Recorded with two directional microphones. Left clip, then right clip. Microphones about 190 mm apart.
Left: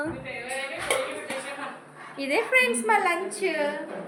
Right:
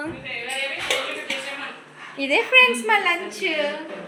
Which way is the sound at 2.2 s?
25° right (ahead or behind).